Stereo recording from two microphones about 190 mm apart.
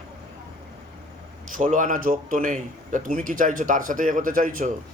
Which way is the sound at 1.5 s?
45° right (ahead or behind).